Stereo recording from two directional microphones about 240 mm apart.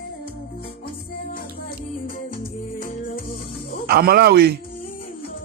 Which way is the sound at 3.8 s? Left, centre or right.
Right.